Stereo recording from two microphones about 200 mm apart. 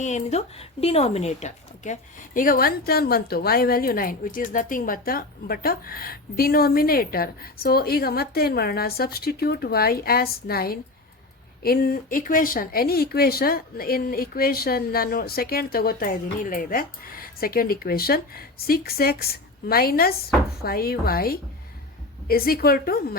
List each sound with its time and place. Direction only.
0.0 s speech: 35° left (ahead or behind)